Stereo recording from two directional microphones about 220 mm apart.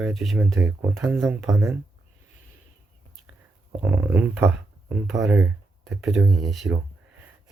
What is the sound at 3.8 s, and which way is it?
Speech, 10° right (ahead or behind).